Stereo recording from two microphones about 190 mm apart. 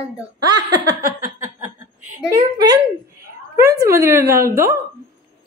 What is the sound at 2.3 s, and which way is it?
A woman's voice, 20° right (ahead or behind).